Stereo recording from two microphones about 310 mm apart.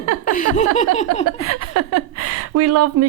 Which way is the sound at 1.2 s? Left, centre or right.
Right.